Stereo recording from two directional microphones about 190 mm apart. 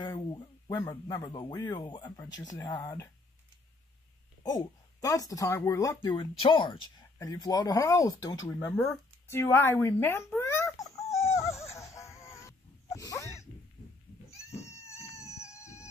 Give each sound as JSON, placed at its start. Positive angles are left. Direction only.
{"t": 0.0, "sound": "speech", "side_deg": 20}
{"t": 4.4, "sound": "speech", "side_deg": 20}
{"t": 11.1, "sound": "baby cry", "side_deg": 15}
{"t": 11.7, "sound": "wheeze", "side_deg": 15}
{"t": 14.7, "sound": "cat", "side_deg": 15}
{"t": 15.6, "sound": "a sound", "side_deg": 15}